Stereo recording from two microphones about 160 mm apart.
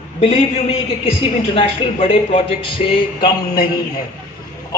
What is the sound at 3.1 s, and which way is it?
Mantra, 25° left (ahead or behind).